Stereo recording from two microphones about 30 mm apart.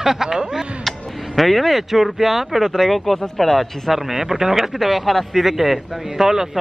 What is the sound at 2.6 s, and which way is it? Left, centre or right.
Speech, centre.